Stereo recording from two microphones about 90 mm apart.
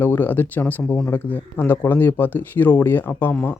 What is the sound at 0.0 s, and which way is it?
Speech, 20° left (ahead or behind).